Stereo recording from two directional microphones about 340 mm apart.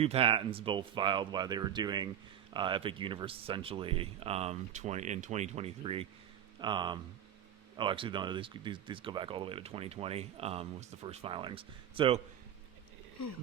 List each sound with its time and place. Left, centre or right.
0.0 s speech: centre